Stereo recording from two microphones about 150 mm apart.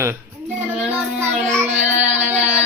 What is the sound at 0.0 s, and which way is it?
Child singing, 15° right (ahead or behind).